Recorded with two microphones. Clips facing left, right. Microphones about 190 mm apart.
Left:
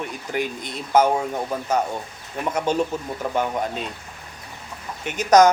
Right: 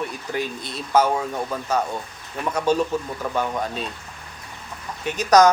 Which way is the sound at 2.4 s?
30° left (ahead or behind).